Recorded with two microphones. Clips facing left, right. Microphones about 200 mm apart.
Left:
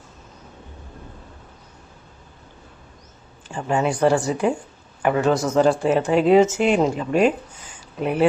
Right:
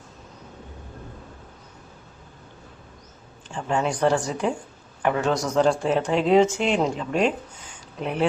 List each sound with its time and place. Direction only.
3.5 s speech: 5° left (ahead or behind)